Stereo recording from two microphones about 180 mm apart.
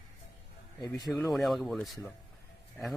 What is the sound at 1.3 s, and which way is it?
Speech, centre (ahead or behind).